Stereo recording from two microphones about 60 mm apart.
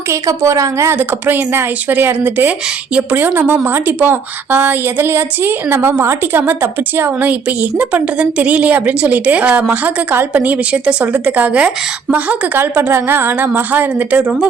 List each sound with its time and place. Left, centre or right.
0.1 s a woman's voice: right
0.9 s a woman's voice: right
7.2 s a woman's voice: right
12.5 s a woman's voice: right